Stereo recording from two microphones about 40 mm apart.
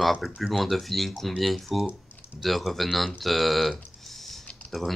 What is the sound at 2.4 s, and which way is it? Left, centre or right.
Speech, centre.